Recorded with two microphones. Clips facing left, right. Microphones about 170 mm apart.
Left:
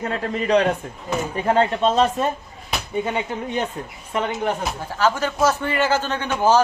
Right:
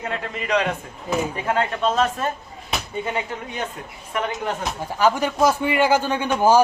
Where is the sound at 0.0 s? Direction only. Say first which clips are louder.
Left 4 dB; 35° left (ahead or behind).